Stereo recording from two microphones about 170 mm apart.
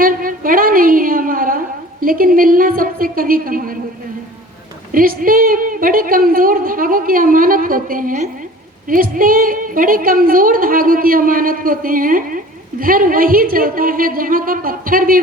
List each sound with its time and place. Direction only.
0.0 s a sound: 55° right (ahead or behind)
2.0 s a woman's voice: 55° right (ahead or behind)
4.9 s a woman's voice: 55° right (ahead or behind)